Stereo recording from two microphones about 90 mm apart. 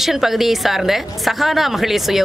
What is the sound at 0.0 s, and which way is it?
A woman's voice, 5° right (ahead or behind).